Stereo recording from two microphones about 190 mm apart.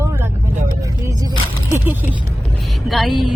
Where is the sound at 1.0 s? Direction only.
20° right (ahead or behind).